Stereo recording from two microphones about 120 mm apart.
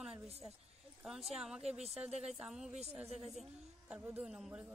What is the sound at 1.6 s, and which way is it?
Speech, 60° right (ahead or behind).